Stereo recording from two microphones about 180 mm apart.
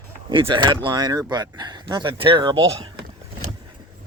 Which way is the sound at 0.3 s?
25° right (ahead or behind).